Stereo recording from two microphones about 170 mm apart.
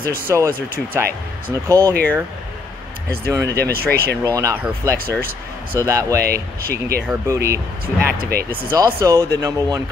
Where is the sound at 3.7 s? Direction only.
65° right (ahead or behind).